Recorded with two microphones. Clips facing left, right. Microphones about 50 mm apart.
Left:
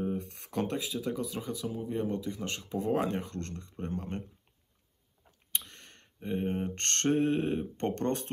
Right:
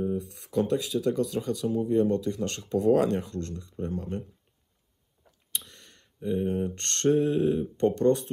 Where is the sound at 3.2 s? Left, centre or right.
Left.